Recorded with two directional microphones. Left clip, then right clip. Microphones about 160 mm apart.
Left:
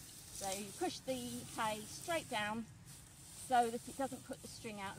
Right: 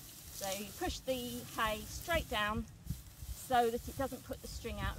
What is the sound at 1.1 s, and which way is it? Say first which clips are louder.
Speech: right 4 dB; 10° right (ahead or behind).